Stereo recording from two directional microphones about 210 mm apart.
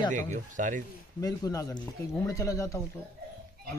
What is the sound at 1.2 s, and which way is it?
Speech, 15° left (ahead or behind).